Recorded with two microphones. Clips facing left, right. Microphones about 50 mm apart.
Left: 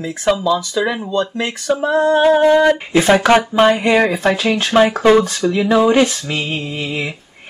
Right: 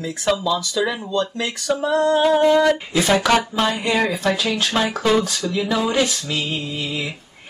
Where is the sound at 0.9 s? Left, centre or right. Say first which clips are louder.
Left 4 dB; centre.